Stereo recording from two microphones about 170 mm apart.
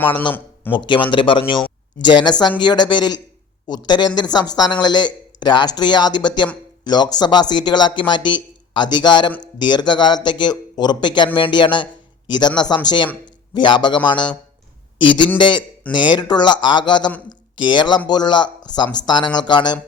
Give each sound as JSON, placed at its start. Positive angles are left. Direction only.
{"t": 0.7, "sound": "speech", "side_deg": 30}
{"t": 15.4, "sound": "speech", "side_deg": 25}